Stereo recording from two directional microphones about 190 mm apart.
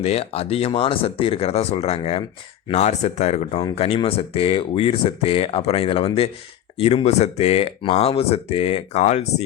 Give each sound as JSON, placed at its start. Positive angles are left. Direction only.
{"t": 0.0, "sound": "speech", "side_deg": 35}